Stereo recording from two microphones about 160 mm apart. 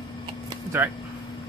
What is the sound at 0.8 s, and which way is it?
Speech, 15° right (ahead or behind).